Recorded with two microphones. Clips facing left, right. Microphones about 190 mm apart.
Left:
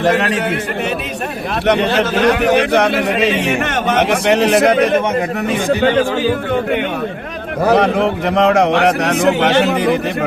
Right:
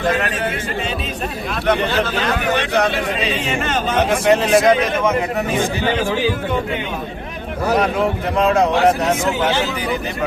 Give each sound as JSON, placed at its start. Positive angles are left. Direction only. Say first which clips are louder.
{"t": 0.0, "sound": "a man's voice", "louder": "left 5 dB", "side_deg": 75}
{"t": 1.6, "sound": "a man's voice", "louder": "left 4 dB", "side_deg": 75}
{"t": 3.3, "sound": "a man's voice", "louder": "left 4 dB", "side_deg": 70}
{"t": 7.7, "sound": "a man's voice", "louder": "left 4 dB", "side_deg": 75}